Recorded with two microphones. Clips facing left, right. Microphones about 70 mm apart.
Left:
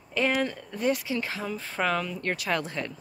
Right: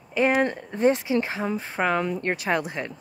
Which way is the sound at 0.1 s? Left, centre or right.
Right.